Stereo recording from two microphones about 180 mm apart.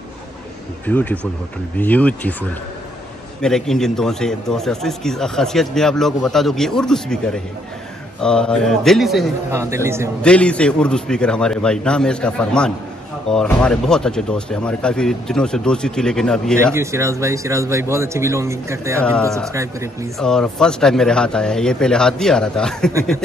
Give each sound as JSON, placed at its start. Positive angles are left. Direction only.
{"t": 0.8, "sound": "speech", "side_deg": 10}
{"t": 3.4, "sound": "a man's voice", "side_deg": 5}
{"t": 9.5, "sound": "speech", "side_deg": -15}
{"t": 10.2, "sound": "a man's voice", "side_deg": 5}
{"t": 16.7, "sound": "speech", "side_deg": -15}
{"t": 20.2, "sound": "a man's voice", "side_deg": 5}